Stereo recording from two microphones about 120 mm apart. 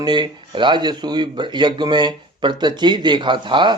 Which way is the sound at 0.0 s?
40° right (ahead or behind).